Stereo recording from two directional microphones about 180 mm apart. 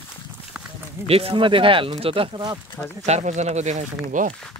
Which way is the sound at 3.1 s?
40° right (ahead or behind).